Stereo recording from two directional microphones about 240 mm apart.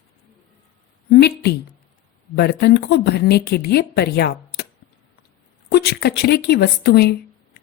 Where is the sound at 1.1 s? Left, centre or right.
Left.